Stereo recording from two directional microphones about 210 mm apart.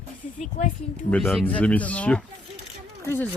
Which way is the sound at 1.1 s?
Centre (ahead or behind).